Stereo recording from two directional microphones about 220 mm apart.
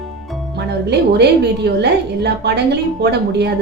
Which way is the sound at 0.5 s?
50° right (ahead or behind).